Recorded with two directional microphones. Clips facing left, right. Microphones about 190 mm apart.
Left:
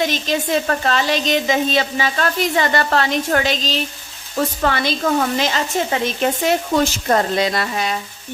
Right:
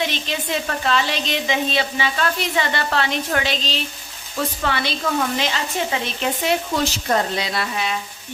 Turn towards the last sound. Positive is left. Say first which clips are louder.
# left 3 dB
turn(degrees=45)  # may be behind; listen again after turning